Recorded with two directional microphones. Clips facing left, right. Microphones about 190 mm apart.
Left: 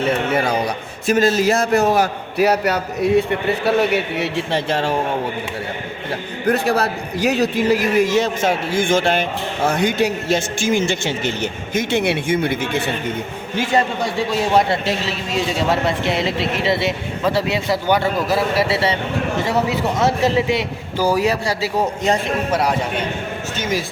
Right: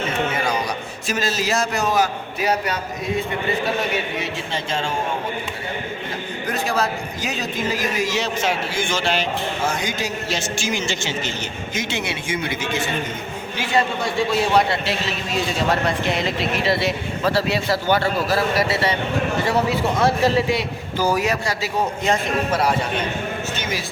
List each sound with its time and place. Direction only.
0.3 s a sound: 60° left (ahead or behind)
1.0 s a man's voice: 55° left (ahead or behind)
6.4 s a man's voice: 60° left (ahead or behind)
13.6 s a man's voice: 40° left (ahead or behind)
15.9 s a man's voice: 25° left (ahead or behind)
21.2 s a man's voice: 35° left (ahead or behind)